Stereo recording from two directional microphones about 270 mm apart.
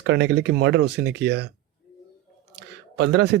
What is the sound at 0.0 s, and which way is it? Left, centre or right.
Speech, right.